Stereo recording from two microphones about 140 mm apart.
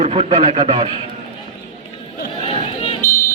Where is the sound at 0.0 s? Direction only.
50° right (ahead or behind).